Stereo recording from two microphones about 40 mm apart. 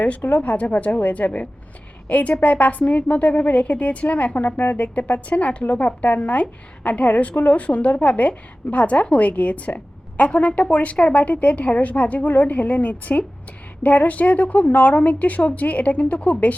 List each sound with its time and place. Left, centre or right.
0.3 s speech: left